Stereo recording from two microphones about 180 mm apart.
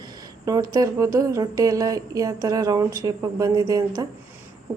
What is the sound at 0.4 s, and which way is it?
A woman's voice, 20° right (ahead or behind).